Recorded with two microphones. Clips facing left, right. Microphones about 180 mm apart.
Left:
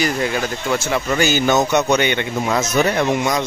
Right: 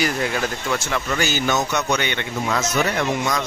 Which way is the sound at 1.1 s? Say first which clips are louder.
Left 5 dB; 20° left (ahead or behind).